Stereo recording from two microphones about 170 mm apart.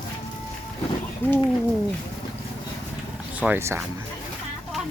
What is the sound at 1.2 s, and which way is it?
Speech, 10° left (ahead or behind).